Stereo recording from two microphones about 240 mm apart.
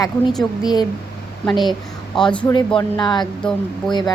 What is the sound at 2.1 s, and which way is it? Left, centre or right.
Speech, centre.